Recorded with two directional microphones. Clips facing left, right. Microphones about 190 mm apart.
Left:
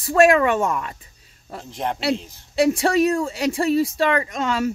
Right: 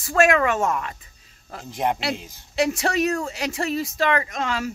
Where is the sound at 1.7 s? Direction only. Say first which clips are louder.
Right 3 dB; 10° right (ahead or behind).